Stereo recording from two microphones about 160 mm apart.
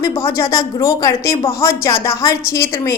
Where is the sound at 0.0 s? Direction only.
15° left (ahead or behind).